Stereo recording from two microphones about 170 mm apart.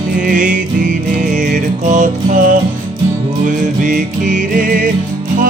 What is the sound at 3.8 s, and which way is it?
Music, 50° right (ahead or behind).